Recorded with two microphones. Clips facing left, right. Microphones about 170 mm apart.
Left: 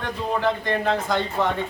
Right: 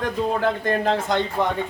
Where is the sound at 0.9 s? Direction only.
25° right (ahead or behind).